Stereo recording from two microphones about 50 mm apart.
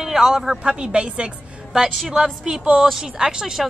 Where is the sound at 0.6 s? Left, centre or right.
Centre.